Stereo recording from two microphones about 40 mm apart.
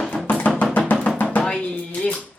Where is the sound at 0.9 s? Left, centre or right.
Left.